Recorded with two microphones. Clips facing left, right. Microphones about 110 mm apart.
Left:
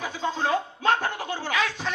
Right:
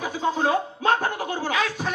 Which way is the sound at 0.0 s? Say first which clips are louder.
Right 4 dB; 45° right (ahead or behind).